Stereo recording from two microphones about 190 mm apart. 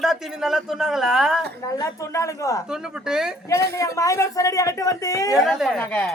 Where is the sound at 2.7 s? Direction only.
5° right (ahead or behind).